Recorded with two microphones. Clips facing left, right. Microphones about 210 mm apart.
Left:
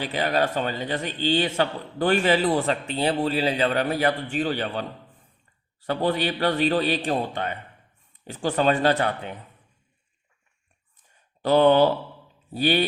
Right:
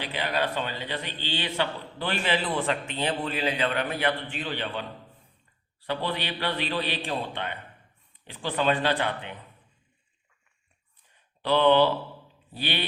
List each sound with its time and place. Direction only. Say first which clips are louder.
0.0 s a man's voice: left 5 dB; 45° left (ahead or behind)
11.1 s a sound: left 5 dB; 45° left (ahead or behind)
12.5 s a man's voice: left 10 dB; 45° left (ahead or behind)